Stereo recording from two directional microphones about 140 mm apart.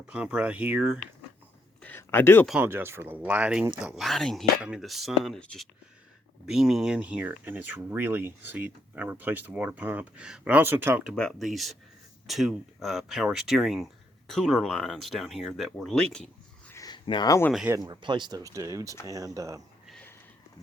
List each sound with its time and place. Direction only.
0.1 s speech: 10° right (ahead or behind)
1.8 s a sound: 15° left (ahead or behind)
2.5 s speech: 10° right (ahead or behind)
11.1 s speech: 5° left (ahead or behind)
16.7 s a sound: 30° left (ahead or behind)
17.7 s speech: 30° right (ahead or behind)